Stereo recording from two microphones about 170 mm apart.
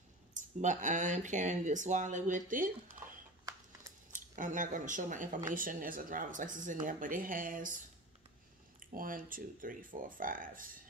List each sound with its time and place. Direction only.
0.3 s speech: 45° right (ahead or behind)
4.1 s speech: 50° right (ahead or behind)